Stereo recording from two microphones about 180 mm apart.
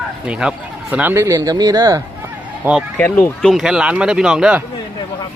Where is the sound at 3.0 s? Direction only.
10° left (ahead or behind).